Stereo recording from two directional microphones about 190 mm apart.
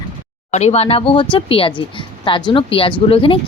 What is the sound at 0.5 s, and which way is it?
A woman's voice, 35° left (ahead or behind).